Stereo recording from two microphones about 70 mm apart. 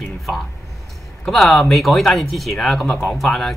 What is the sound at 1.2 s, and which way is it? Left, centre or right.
Speech, centre.